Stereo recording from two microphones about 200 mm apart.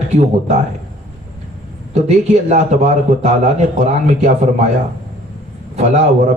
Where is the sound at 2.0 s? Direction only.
35° right (ahead or behind).